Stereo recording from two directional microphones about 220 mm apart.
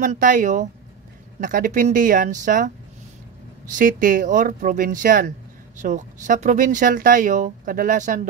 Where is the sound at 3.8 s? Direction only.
40° right (ahead or behind).